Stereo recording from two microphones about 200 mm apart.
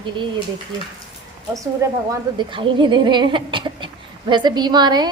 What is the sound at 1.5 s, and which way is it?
A woman's voice, 15° right (ahead or behind).